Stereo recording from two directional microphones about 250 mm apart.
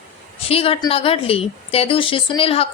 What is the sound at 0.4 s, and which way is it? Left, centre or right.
A woman's voice, left.